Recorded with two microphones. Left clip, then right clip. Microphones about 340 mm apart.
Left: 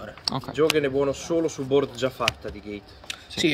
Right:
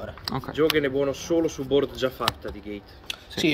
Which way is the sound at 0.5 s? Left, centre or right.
Left.